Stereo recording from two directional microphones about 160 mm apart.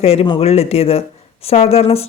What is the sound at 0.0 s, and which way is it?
Speech, 40° left (ahead or behind).